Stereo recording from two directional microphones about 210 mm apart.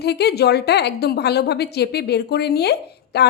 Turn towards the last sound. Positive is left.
turn(degrees=50)  # may be behind; listen again after turning